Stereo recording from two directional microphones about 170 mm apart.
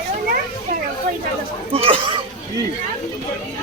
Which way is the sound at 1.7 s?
35° right (ahead or behind).